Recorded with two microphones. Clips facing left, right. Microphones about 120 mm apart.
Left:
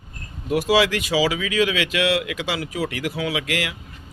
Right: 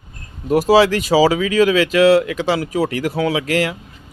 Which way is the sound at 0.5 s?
35° right (ahead or behind).